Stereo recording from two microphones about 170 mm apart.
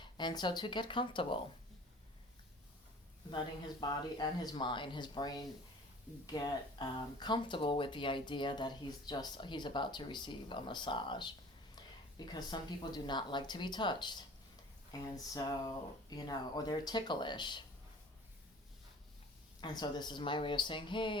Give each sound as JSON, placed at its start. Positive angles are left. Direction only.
{"t": 0.0, "sound": "speech", "side_deg": 25}
{"t": 3.2, "sound": "speech", "side_deg": 25}
{"t": 19.6, "sound": "speech", "side_deg": 25}